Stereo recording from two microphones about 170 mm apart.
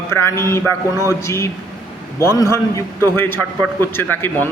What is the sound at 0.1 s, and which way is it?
A man's voice, 15° left (ahead or behind).